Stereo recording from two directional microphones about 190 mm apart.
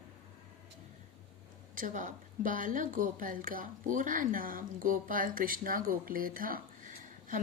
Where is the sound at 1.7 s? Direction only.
45° right (ahead or behind).